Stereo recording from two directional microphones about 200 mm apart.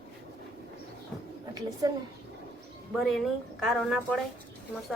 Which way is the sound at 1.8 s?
20° right (ahead or behind).